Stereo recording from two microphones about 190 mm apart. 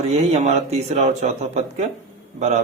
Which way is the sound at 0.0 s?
35° right (ahead or behind).